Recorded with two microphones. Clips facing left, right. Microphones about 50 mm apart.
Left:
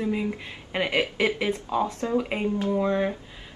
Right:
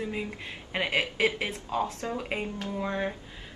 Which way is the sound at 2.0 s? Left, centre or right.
Left.